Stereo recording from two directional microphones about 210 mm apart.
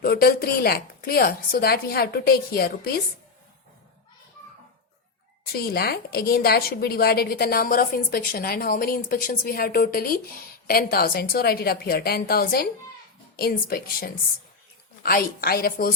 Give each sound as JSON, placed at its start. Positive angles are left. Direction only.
{"t": 0.0, "sound": "a woman's voice", "side_deg": 45}
{"t": 5.5, "sound": "a woman's voice", "side_deg": 45}